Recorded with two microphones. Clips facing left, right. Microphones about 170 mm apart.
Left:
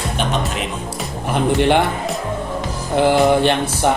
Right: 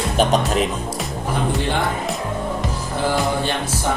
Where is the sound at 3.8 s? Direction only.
70° left (ahead or behind).